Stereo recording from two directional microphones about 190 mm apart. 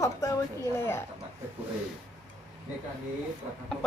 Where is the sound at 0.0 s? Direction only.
15° left (ahead or behind).